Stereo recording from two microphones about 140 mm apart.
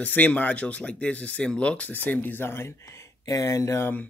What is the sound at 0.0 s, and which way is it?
Speech, 10° left (ahead or behind).